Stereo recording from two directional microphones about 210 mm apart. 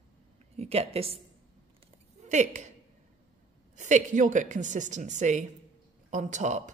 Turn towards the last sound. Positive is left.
turn(degrees=-35)  # may be behind; listen again after turning